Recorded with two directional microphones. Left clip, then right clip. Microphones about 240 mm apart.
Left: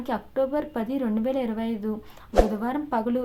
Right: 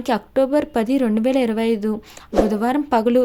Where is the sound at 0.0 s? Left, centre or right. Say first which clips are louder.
Right 7 dB; right.